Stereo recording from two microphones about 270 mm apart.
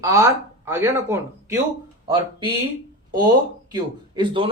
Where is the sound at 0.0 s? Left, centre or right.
Centre.